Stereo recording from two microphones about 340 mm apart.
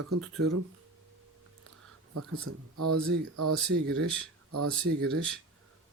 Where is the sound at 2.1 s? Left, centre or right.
Right.